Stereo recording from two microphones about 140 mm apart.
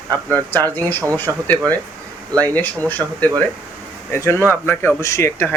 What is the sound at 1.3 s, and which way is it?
Speech, 15° right (ahead or behind).